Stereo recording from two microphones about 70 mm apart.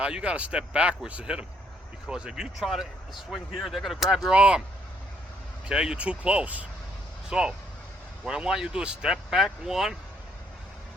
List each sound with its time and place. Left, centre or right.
0.0 s speech: centre
5.6 s speech: centre